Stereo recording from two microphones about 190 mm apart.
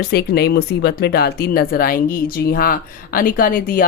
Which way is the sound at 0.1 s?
55° left (ahead or behind).